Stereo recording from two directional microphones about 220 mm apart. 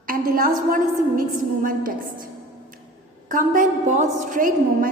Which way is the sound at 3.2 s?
35° right (ahead or behind).